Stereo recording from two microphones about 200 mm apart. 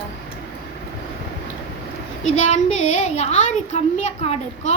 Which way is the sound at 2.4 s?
35° left (ahead or behind).